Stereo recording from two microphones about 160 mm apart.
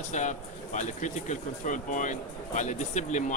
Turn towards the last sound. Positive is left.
turn(degrees=50)  # may be behind; listen again after turning